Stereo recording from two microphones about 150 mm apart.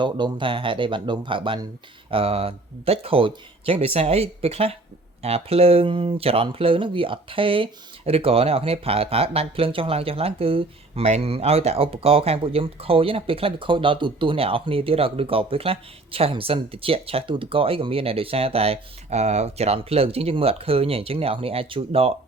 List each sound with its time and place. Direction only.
0.0 s speech: 30° right (ahead or behind)